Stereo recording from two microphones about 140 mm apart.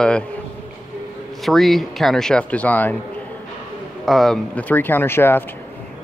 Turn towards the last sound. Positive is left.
turn(degrees=15)  # may be behind; listen again after turning